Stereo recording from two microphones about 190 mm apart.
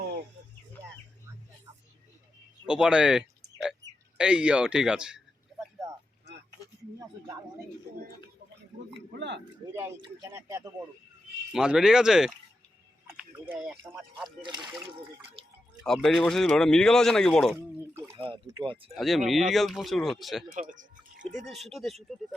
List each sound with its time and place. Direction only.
2.6 s speech: 5° right (ahead or behind)
8.9 s a sound: 65° right (ahead or behind)
9.6 s speech: 20° right (ahead or behind)
11.5 s speech: 5° right (ahead or behind)
14.3 s speech: 25° right (ahead or behind)
15.4 s drip: 30° right (ahead or behind)
15.9 s speech: centre (ahead or behind)
17.7 s a sound: 10° right (ahead or behind)
18.2 s speech: 25° right (ahead or behind)
18.9 s speech: centre (ahead or behind)
20.5 s speech: 40° right (ahead or behind)
21.4 s speech: centre (ahead or behind)